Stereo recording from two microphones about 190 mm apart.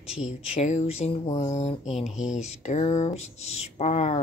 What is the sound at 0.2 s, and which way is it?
Speech, 35° left (ahead or behind).